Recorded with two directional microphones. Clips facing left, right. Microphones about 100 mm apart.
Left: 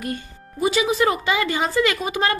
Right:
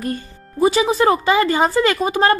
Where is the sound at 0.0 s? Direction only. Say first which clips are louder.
Right 4 dB; 35° right (ahead or behind).